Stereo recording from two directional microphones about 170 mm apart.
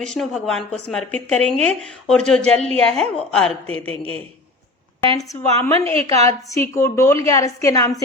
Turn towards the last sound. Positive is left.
turn(degrees=20)  # may be behind; listen again after turning